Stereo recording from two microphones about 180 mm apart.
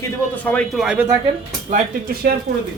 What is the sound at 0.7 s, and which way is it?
Speech, 5° right (ahead or behind).